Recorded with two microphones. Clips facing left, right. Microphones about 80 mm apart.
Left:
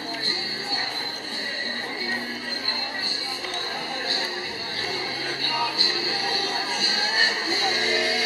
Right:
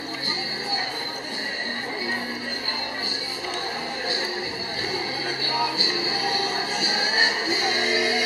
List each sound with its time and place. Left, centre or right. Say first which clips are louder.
5.4 s music: right 1 dB; centre
7.2 s music: right 1 dB; centre